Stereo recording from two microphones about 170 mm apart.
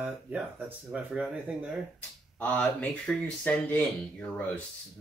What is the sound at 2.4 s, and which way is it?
Speech, 10° left (ahead or behind).